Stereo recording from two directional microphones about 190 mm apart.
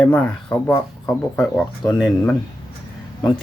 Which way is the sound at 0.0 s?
5° left (ahead or behind).